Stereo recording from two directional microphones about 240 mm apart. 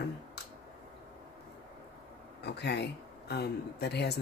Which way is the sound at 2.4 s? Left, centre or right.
Left.